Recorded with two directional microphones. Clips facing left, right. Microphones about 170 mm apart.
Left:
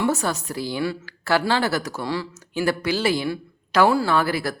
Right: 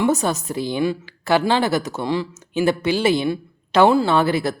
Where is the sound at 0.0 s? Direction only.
20° right (ahead or behind).